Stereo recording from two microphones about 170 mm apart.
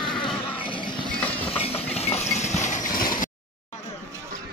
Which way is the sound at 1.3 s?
35° left (ahead or behind).